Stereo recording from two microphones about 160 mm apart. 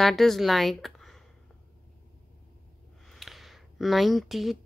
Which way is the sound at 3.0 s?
Centre (ahead or behind).